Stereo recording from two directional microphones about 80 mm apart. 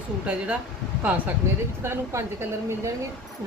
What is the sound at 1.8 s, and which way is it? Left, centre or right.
Speech, right.